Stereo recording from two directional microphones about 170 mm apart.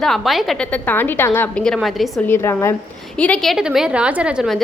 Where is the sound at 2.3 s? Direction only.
15° left (ahead or behind).